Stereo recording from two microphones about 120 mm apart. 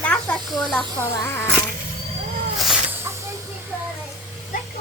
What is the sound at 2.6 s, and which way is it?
Snake, centre (ahead or behind).